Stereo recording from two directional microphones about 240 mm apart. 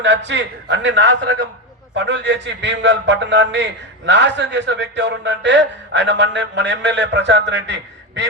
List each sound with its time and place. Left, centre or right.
0.0 s a man's voice: right